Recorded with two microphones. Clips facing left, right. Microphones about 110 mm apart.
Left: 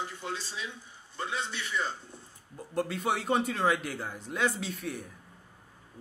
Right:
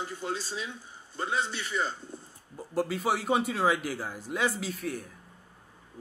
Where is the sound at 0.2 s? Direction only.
45° right (ahead or behind).